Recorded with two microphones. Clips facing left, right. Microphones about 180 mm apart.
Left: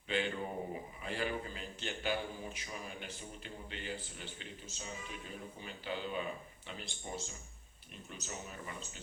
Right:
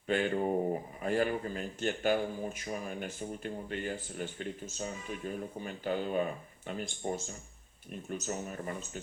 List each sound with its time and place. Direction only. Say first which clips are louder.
0.1 s speech: right 7 dB; 50° right (ahead or behind)